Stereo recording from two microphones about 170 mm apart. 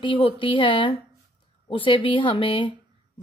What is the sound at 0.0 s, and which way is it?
A woman's voice, 30° left (ahead or behind).